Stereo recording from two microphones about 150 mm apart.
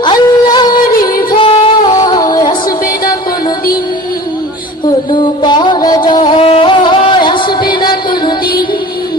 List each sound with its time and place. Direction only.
0.0 s music: 30° left (ahead or behind)
5.1 s music: 30° left (ahead or behind)